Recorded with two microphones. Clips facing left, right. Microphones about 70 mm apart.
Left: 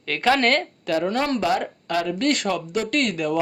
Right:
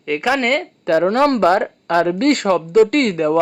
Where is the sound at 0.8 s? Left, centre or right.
Right.